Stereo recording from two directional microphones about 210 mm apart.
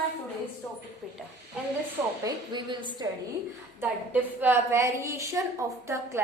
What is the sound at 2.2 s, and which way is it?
Speech, 20° right (ahead or behind).